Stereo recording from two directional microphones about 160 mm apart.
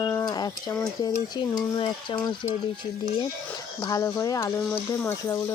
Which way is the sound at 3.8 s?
20° left (ahead or behind).